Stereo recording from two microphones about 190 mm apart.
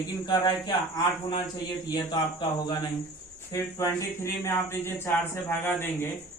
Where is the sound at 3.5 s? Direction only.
15° left (ahead or behind).